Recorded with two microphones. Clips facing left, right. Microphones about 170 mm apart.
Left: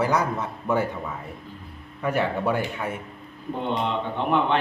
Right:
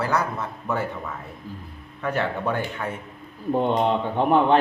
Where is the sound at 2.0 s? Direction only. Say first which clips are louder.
Left 1 dB; 10° left (ahead or behind).